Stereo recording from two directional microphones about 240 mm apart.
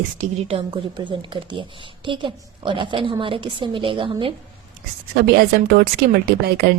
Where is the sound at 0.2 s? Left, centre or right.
Right.